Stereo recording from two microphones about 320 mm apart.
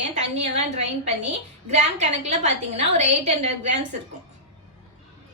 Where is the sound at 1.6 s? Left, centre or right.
Right.